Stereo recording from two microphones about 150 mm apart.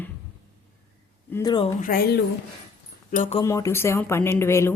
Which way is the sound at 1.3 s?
25° left (ahead or behind).